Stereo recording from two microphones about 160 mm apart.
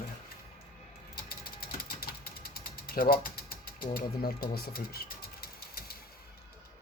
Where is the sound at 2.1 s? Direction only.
70° left (ahead or behind).